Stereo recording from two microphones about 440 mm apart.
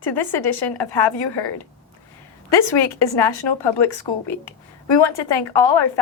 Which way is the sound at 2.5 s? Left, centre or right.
Left.